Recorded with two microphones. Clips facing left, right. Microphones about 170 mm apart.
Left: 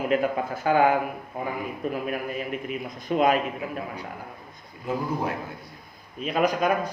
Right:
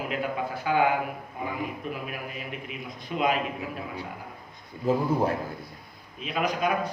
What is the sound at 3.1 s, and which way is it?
Speech, 45° left (ahead or behind).